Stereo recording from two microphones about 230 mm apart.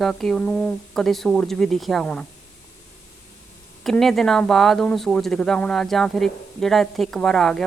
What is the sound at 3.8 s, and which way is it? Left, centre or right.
Speech, centre.